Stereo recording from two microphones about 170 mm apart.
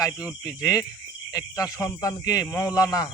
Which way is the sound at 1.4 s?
20° left (ahead or behind).